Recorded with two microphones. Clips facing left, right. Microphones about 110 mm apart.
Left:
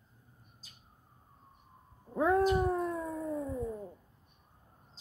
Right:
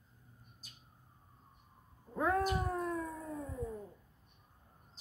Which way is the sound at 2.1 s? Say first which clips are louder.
Left 6 dB; 25° left (ahead or behind).